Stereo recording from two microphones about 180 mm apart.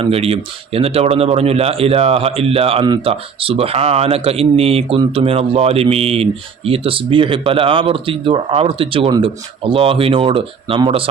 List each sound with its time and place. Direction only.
0.0 s speech: 35° right (ahead or behind)